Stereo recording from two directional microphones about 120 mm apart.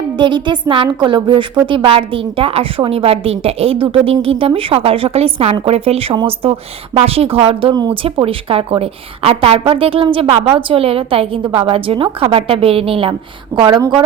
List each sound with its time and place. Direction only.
0.2 s a woman's voice: 40° right (ahead or behind)
7.7 s speech: 35° right (ahead or behind)
8.0 s a woman's voice: 50° right (ahead or behind)
13.6 s speech: 40° right (ahead or behind)